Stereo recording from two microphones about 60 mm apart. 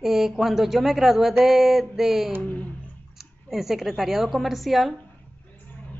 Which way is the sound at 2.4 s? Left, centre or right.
Left.